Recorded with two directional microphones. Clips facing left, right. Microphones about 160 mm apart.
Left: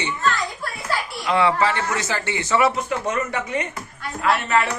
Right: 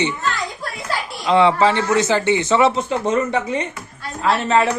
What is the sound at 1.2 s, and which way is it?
A woman's voice, 20° right (ahead or behind).